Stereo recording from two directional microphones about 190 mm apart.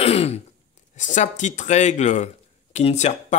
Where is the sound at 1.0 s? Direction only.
40° left (ahead or behind).